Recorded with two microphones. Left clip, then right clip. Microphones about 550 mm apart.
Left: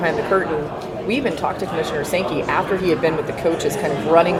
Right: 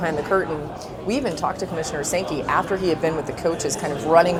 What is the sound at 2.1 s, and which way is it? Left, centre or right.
Speech, right.